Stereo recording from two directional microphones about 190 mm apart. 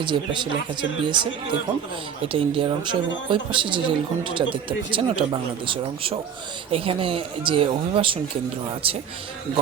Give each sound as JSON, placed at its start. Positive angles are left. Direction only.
{"t": 0.0, "sound": "speech", "side_deg": -25}